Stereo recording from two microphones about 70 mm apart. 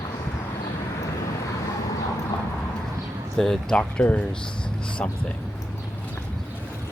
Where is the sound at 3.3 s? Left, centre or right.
Centre.